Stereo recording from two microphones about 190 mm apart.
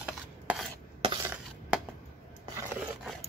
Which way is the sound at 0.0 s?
5° right (ahead or behind).